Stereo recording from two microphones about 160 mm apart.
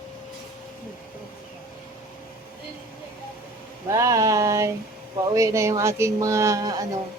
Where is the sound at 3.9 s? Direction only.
20° right (ahead or behind).